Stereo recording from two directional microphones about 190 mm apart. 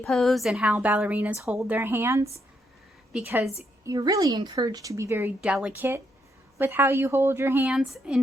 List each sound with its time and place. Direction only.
0.0 s a woman's voice: centre (ahead or behind)
3.8 s a woman's voice: 20° right (ahead or behind); by 8.2 s 5° right (ahead or behind)